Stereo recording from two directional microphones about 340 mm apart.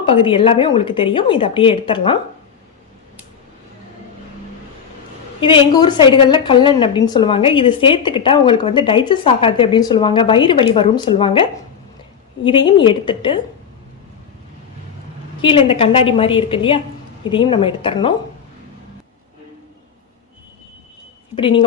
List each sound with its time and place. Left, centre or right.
0.0 s a woman's voice: centre
5.4 s a woman's voice: centre
15.4 s a woman's voice: centre
21.3 s speech: centre